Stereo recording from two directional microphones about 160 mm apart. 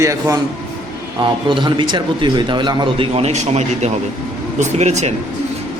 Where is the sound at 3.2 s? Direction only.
40° right (ahead or behind).